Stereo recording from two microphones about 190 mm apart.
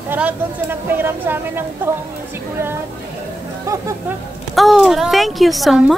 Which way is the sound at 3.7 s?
15° right (ahead or behind).